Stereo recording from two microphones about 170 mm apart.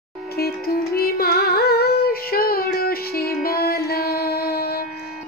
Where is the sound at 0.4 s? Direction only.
65° left (ahead or behind).